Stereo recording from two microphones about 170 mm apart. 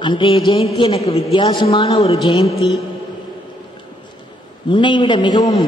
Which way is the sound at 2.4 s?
20° left (ahead or behind).